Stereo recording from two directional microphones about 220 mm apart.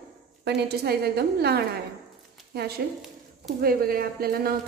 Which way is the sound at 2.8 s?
45° right (ahead or behind).